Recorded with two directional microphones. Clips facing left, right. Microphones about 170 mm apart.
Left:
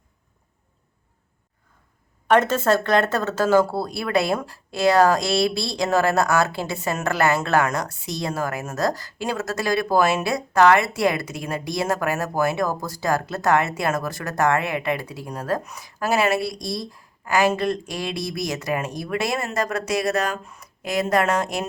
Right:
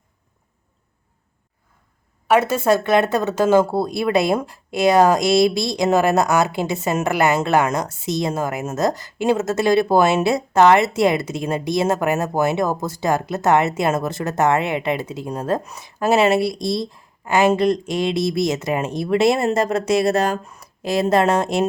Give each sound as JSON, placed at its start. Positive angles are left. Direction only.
{"t": 2.2, "sound": "speech", "side_deg": -10}